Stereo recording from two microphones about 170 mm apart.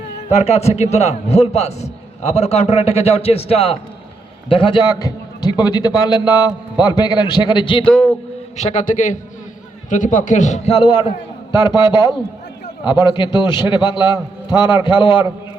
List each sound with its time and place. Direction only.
0.3 s a man's voice: 40° left (ahead or behind)
8.6 s a man's voice: 45° left (ahead or behind); by 15.3 s 30° left (ahead or behind)